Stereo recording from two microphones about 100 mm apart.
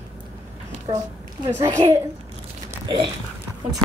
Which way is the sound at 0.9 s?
55° right (ahead or behind).